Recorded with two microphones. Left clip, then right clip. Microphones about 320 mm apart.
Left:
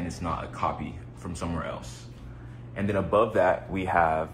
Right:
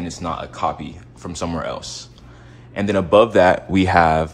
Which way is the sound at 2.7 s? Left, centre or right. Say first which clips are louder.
Right 10 dB; right.